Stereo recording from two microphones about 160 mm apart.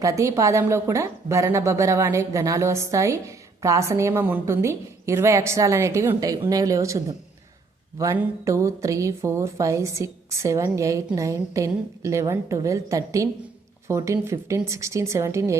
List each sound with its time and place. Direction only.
0.0 s a woman's voice: 20° right (ahead or behind)